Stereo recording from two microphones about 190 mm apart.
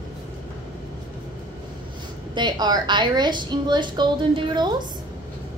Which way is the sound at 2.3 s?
25° right (ahead or behind).